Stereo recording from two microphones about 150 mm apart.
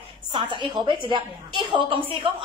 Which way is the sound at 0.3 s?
30° right (ahead or behind).